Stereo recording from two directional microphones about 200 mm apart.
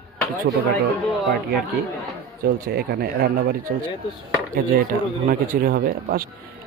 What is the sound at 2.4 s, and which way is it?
Speech, 50° right (ahead or behind).